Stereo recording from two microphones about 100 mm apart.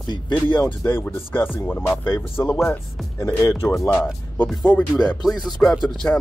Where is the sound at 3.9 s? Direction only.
15° left (ahead or behind).